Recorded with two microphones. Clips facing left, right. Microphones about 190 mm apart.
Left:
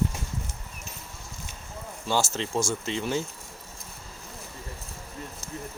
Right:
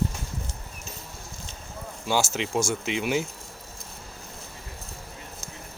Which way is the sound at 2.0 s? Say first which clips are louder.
Right 1 dB; 5° right (ahead or behind).